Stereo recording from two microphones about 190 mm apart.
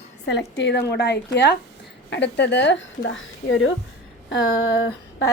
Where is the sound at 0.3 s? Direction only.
70° left (ahead or behind).